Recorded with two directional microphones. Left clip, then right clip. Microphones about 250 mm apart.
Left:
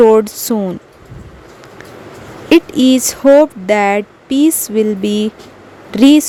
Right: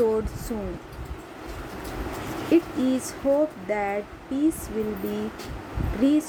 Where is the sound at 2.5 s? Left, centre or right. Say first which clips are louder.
Left 13 dB; left.